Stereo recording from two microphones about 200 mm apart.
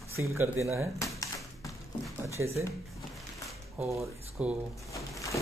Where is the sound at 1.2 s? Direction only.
15° left (ahead or behind).